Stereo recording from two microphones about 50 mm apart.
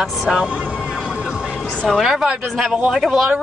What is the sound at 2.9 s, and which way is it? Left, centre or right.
Speech, centre.